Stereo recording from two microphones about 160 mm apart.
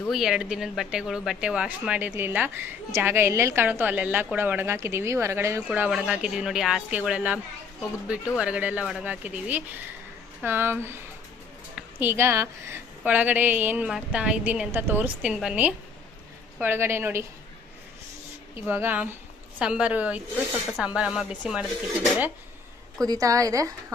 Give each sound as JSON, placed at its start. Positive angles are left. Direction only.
{"t": 0.1, "sound": "a woman's voice", "side_deg": -5}
{"t": 18.6, "sound": "a woman's voice", "side_deg": -10}
{"t": 23.0, "sound": "a woman's voice", "side_deg": -20}